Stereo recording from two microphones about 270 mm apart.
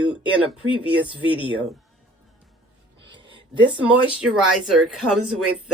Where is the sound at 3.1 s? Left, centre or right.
Centre.